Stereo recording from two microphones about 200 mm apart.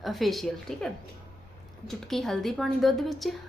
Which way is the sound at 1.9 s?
Centre (ahead or behind).